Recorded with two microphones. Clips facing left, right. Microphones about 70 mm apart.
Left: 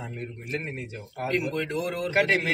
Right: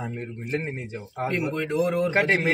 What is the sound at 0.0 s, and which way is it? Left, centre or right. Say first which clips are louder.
Speech: right 4 dB; right.